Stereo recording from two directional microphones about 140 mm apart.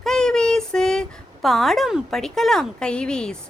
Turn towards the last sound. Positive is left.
turn(degrees=5)  # may be behind; listen again after turning